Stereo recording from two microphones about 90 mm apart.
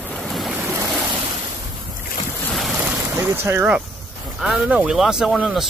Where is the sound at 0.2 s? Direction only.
Centre (ahead or behind).